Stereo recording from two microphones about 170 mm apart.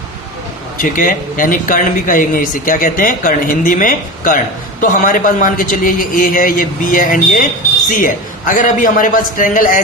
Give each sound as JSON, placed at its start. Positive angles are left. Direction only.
{"t": 0.8, "sound": "a man's voice", "side_deg": 55}